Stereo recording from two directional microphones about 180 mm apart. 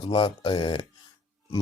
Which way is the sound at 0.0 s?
30° left (ahead or behind).